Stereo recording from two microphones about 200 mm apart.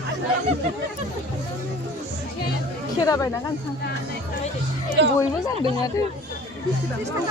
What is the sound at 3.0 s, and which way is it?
Speech, 15° left (ahead or behind).